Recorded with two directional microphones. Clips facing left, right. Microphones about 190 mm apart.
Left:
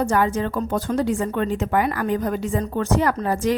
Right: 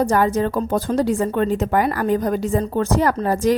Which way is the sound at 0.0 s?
40° right (ahead or behind).